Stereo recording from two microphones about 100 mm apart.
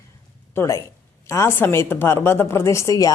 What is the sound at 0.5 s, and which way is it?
A woman's voice, 30° left (ahead or behind).